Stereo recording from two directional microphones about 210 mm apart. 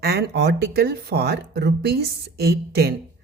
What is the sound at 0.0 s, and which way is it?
Speech, 50° right (ahead or behind).